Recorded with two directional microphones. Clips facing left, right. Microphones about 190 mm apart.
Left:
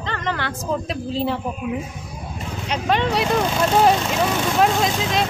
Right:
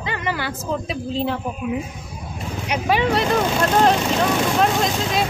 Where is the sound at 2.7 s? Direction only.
5° right (ahead or behind).